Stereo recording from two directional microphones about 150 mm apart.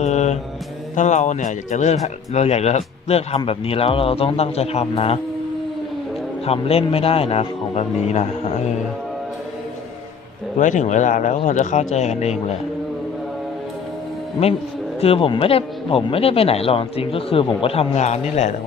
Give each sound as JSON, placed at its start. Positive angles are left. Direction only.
{"t": 0.0, "sound": "mantra", "side_deg": 50}
{"t": 0.9, "sound": "speech", "side_deg": 55}
{"t": 6.4, "sound": "speech", "side_deg": 40}
{"t": 10.6, "sound": "speech", "side_deg": 55}
{"t": 15.0, "sound": "speech", "side_deg": 40}